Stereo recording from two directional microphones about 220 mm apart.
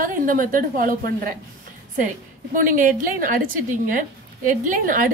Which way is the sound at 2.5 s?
40° right (ahead or behind).